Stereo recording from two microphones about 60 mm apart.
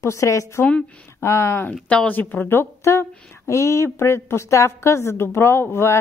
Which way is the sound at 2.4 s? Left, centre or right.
Left.